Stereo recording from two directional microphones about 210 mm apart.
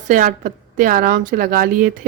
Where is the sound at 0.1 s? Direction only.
40° right (ahead or behind).